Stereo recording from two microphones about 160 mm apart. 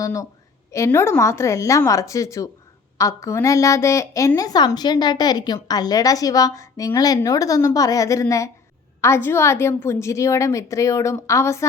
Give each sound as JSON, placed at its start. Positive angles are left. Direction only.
{"t": 0.0, "sound": "a woman's voice", "side_deg": 20}